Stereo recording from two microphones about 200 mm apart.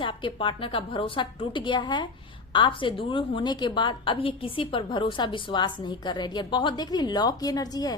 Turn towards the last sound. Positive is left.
turn(degrees=20)  # may be behind; listen again after turning